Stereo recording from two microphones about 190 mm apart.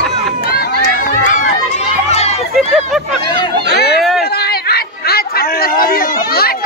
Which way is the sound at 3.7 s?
60° left (ahead or behind).